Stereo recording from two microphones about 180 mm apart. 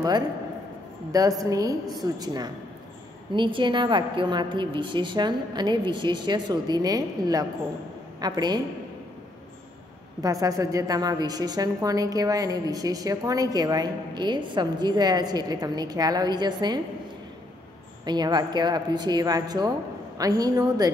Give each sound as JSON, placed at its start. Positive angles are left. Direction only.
{"t": 1.4, "sound": "a woman's voice", "side_deg": -20}
{"t": 10.2, "sound": "a woman's voice", "side_deg": -20}
{"t": 18.0, "sound": "a woman's voice", "side_deg": -25}